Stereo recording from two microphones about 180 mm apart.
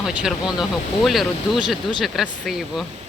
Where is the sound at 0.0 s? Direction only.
5° right (ahead or behind).